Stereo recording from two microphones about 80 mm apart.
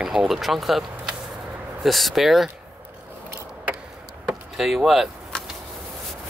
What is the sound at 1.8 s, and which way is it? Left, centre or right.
Speech, centre.